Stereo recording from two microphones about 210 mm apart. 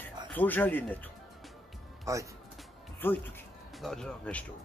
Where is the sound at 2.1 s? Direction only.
15° right (ahead or behind).